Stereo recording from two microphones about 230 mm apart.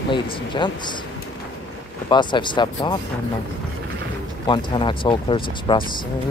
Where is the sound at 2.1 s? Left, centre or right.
Centre.